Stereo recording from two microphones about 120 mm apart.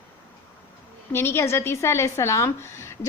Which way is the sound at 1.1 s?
20° left (ahead or behind).